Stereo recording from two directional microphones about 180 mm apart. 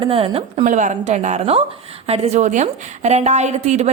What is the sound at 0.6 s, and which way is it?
A woman's voice, 45° right (ahead or behind).